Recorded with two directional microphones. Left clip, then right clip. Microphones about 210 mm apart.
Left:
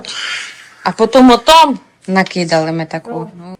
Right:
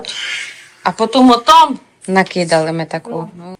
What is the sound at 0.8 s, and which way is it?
Speech, 20° left (ahead or behind).